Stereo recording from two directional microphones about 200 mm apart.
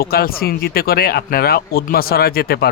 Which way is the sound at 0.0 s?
50° left (ahead or behind).